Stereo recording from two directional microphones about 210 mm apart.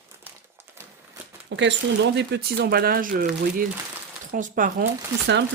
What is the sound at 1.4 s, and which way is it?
Speech, 60° right (ahead or behind).